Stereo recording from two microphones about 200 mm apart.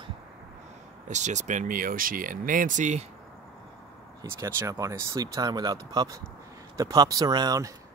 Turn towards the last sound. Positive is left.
turn(degrees=-20)  # may be behind; listen again after turning